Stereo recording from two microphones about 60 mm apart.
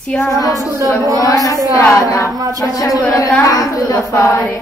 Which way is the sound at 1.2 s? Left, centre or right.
Left.